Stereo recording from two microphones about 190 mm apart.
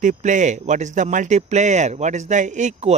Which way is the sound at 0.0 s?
40° right (ahead or behind).